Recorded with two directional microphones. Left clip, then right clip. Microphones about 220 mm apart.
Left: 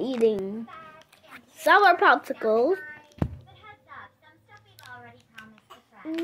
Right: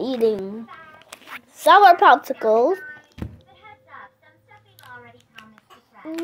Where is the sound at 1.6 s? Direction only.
5° right (ahead or behind).